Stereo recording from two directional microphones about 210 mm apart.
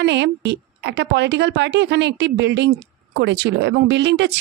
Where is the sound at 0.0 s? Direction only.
55° right (ahead or behind).